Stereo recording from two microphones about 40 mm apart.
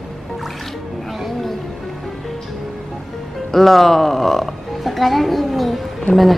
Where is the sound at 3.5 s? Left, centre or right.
Centre.